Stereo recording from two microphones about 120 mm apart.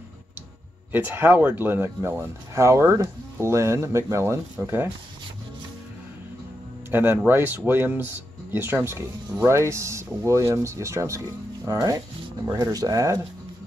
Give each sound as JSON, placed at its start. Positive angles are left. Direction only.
{"t": 0.9, "sound": "speech", "side_deg": -15}
{"t": 6.9, "sound": "speech", "side_deg": -20}